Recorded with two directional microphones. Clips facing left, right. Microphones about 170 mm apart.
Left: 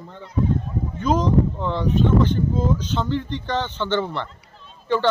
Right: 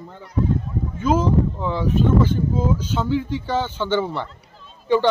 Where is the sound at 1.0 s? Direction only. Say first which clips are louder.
Right 1 dB; 5° right (ahead or behind).